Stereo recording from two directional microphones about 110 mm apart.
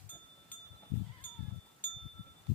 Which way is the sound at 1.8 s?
15° left (ahead or behind).